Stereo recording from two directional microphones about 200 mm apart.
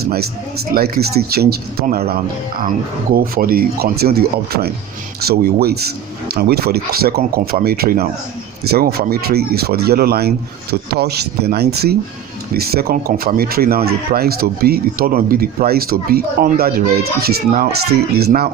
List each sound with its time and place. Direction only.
0.7 s speech: 50° right (ahead or behind)